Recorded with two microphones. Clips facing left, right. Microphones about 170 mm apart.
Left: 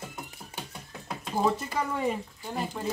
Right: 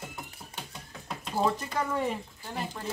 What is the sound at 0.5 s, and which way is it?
Speech, 10° left (ahead or behind).